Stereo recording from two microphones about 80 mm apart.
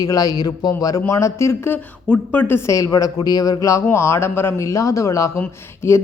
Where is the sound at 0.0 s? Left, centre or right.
Left.